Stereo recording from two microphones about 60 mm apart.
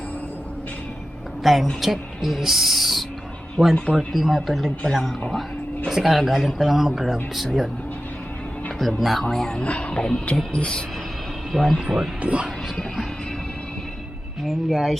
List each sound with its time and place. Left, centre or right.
1.5 s speech: centre
3.6 s speech: centre
3.9 s speech: centre
5.9 s speech: centre
8.8 s speech: centre
9.2 s speech: centre
11.5 s speech: centre
12.2 s speech: centre
14.4 s speech: centre